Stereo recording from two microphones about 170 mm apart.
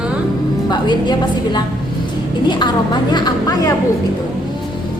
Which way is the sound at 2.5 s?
25° left (ahead or behind).